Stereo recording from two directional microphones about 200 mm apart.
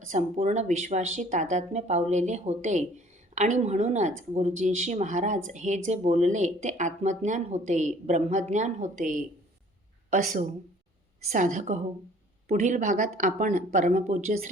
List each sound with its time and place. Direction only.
0.1 s speech: 35° right (ahead or behind)